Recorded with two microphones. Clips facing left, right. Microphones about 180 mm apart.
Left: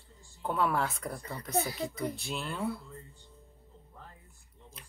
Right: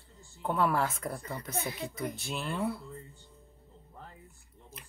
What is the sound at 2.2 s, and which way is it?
Speech, centre (ahead or behind).